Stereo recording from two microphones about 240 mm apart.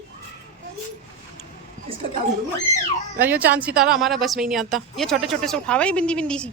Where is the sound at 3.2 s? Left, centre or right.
Centre.